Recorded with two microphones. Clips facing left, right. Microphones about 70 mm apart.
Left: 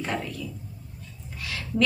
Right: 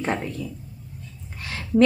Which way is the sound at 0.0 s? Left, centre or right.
Right.